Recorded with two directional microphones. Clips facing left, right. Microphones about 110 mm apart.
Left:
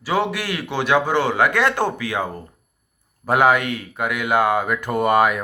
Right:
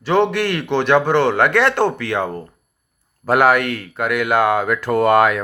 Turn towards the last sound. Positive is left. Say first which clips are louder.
# right 3 dB
turn(degrees=15)  # may be behind; listen again after turning